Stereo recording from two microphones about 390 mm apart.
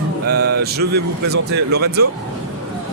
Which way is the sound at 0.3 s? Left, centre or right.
Right.